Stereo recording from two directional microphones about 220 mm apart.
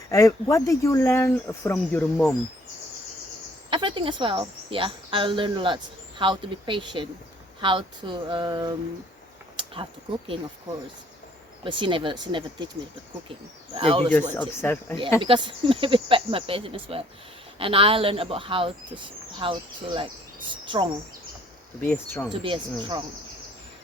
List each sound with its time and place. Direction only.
0.1 s speech: 15° left (ahead or behind)
3.7 s a woman's voice: 25° right (ahead or behind)
11.6 s a woman's voice: 25° right (ahead or behind)
13.7 s a woman's voice: 25° right (ahead or behind)
14.3 s speech: 10° left (ahead or behind)
15.2 s a woman's voice: 25° right (ahead or behind)
21.8 s speech: 10° left (ahead or behind)
22.3 s a woman's voice: 20° right (ahead or behind)